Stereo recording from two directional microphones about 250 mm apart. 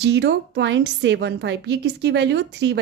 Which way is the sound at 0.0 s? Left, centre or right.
Right.